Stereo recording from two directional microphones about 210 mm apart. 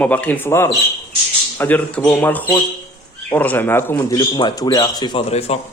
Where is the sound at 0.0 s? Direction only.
5° left (ahead or behind).